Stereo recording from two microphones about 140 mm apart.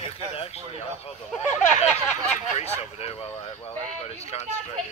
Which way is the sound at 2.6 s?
50° left (ahead or behind).